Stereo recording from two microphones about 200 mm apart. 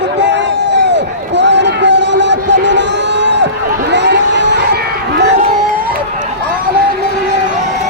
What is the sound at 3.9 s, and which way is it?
Crowd, 60° right (ahead or behind).